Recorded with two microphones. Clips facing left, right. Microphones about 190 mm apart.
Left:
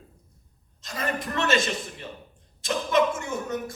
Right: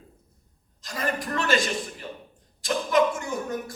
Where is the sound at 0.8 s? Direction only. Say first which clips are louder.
Right 1 dB; 25° left (ahead or behind).